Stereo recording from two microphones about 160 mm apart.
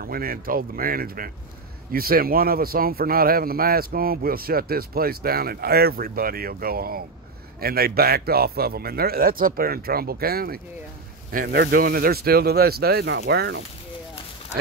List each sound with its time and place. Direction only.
0.0 s speech: 65° right (ahead or behind)
11.3 s speech: 90° right